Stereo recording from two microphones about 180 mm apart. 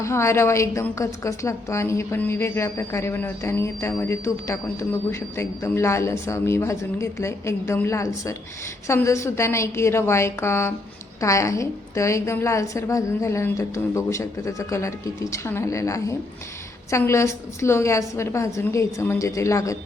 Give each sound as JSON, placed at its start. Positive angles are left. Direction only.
{"t": 0.0, "sound": "a woman's voice", "side_deg": 15}